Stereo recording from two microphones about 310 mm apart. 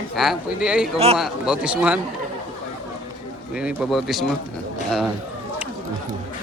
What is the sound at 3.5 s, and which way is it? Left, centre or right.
Speech, centre.